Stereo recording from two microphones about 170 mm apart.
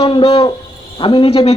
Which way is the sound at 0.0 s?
30° left (ahead or behind).